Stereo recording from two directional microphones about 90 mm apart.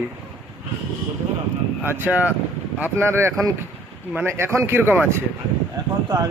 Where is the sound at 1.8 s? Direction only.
20° right (ahead or behind).